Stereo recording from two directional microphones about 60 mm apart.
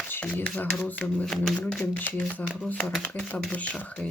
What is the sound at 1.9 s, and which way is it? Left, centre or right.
Speech, left.